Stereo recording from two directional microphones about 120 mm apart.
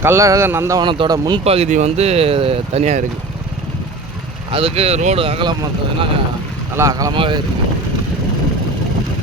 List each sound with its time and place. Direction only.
0.0 s speech: 25° right (ahead or behind)
0.8 s speech: 40° right (ahead or behind)
1.5 s speech: 60° right (ahead or behind)
4.5 s speech: 55° right (ahead or behind)
5.2 s speech: 45° right (ahead or behind)
6.7 s speech: 25° right (ahead or behind)
7.1 s speech: 40° right (ahead or behind)